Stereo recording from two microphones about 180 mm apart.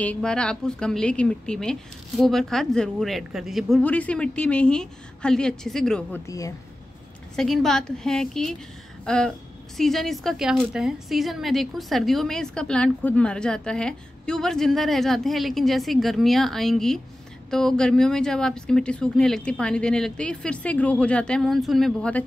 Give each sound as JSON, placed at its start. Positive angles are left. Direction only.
{"t": 0.0, "sound": "a woman's voice", "side_deg": 5}
{"t": 6.2, "sound": "speech", "side_deg": 20}
{"t": 7.3, "sound": "a woman's voice", "side_deg": 0}
{"t": 9.0, "sound": "a sound", "side_deg": 5}
{"t": 9.8, "sound": "a woman's voice", "side_deg": 0}